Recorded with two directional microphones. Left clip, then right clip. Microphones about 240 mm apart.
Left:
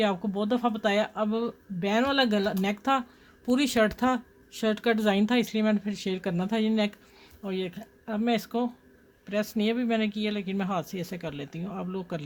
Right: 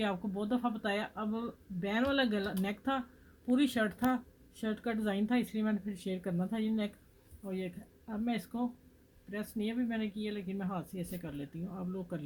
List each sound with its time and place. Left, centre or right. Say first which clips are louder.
0.0 s speech: left 9 dB; left